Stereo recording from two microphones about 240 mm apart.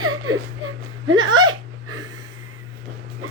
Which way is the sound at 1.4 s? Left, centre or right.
Right.